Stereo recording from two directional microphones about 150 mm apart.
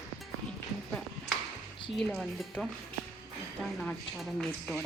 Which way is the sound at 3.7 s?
Centre (ahead or behind).